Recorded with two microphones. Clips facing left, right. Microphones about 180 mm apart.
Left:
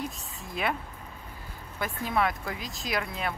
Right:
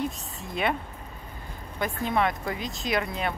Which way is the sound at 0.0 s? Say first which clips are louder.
Right 5 dB; centre (ahead or behind).